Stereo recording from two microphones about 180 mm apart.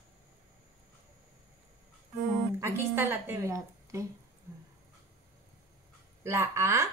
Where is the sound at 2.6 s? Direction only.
15° right (ahead or behind).